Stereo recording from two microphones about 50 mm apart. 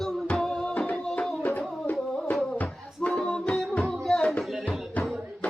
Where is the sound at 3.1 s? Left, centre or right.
Centre.